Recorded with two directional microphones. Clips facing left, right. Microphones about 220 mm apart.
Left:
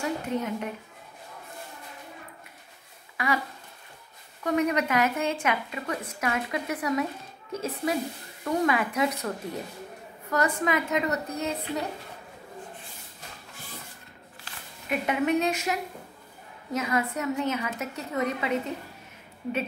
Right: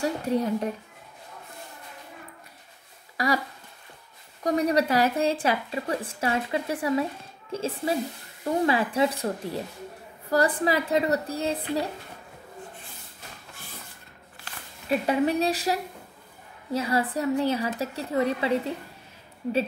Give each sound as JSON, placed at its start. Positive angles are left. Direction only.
{"t": 0.0, "sound": "a woman's voice", "side_deg": -35}
{"t": 3.2, "sound": "a woman's voice", "side_deg": -35}
{"t": 4.4, "sound": "a woman's voice", "side_deg": -35}
{"t": 14.9, "sound": "a woman's voice", "side_deg": -35}